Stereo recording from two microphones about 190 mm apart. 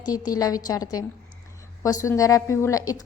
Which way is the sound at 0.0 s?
20° left (ahead or behind).